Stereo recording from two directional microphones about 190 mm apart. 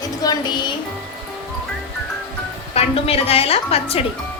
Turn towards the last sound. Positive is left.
turn(degrees=30)  # may be behind; listen again after turning